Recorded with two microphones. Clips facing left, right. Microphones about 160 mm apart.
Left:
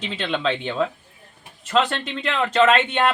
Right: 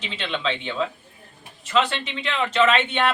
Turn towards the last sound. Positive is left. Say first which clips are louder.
# left 2 dB
turn(degrees=50)  # may be behind; listen again after turning